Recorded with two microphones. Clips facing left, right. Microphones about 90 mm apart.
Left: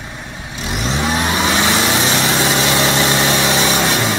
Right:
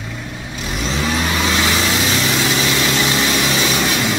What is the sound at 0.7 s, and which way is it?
Vehicle, 20° left (ahead or behind).